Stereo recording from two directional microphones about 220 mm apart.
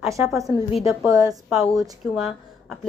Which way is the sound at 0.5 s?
25° left (ahead or behind).